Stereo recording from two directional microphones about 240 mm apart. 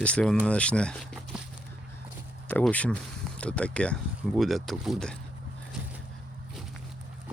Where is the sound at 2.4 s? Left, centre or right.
Centre.